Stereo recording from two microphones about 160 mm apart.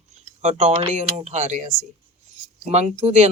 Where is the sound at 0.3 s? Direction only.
45° right (ahead or behind).